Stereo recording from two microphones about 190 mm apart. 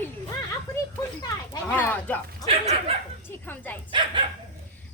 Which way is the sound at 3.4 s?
10° left (ahead or behind).